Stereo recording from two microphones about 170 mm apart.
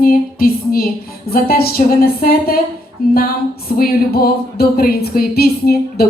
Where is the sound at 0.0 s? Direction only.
55° left (ahead or behind).